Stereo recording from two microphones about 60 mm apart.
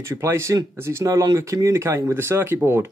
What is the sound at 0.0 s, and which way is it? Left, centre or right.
Speech, right.